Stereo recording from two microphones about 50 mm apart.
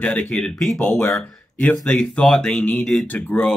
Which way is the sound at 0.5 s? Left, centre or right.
Centre.